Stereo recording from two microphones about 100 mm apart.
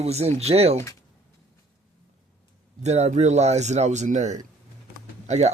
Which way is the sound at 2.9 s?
90° right.